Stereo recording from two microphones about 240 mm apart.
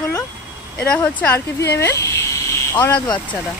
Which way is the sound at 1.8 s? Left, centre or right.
Centre.